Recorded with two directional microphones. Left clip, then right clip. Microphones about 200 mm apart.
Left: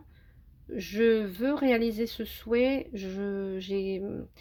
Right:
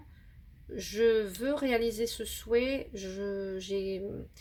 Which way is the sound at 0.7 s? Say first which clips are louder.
Left 2 dB; 40° left (ahead or behind).